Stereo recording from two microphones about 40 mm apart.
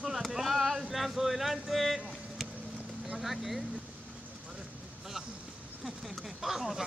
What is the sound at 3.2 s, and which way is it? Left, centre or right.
Speech, centre.